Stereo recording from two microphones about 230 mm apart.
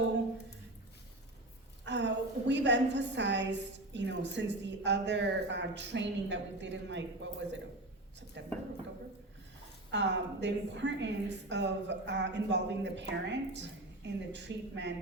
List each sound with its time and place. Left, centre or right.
1.8 s a woman's voice: right
9.9 s a woman's voice: right